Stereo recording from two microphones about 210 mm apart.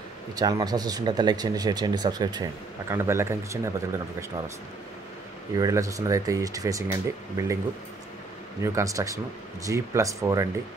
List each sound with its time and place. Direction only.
0.4 s speech: 20° right (ahead or behind)
5.6 s speech: 15° right (ahead or behind)
8.6 s speech: 15° right (ahead or behind)